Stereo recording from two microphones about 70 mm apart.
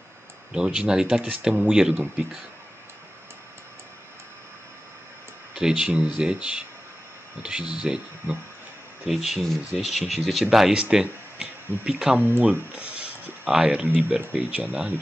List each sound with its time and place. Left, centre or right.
0.5 s speech: centre
5.5 s speech: centre
12.2 s speech: right
12.7 s a sound: centre
13.8 s speech: right